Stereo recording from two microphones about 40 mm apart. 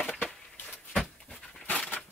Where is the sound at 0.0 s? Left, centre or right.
Left.